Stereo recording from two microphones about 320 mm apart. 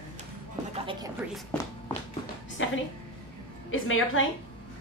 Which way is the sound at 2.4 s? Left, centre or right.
Left.